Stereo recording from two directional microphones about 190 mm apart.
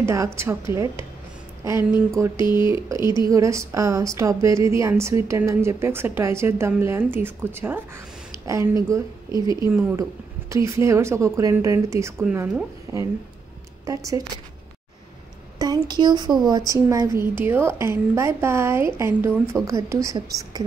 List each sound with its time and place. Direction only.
0.0 s a woman's voice: 15° right (ahead or behind)
2.3 s speech: 25° left (ahead or behind)
3.3 s a woman's voice: 15° right (ahead or behind)
9.3 s speech: 20° left (ahead or behind)
9.7 s a woman's voice: 10° right (ahead or behind)
15.6 s a woman's voice: 20° right (ahead or behind)